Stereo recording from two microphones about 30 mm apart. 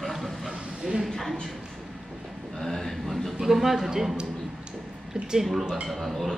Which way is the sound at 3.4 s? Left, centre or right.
Centre.